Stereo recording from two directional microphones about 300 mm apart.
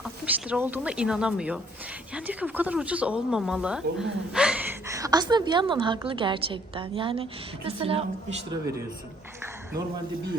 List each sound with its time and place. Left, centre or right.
0.0 s a woman's voice: centre